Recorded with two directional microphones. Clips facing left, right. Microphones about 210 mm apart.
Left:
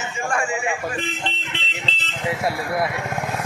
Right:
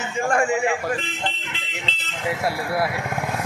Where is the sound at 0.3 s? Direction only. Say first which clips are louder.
Right 5 dB; 60° right (ahead or behind).